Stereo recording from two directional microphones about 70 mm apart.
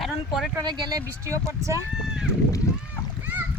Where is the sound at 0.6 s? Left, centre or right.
Right.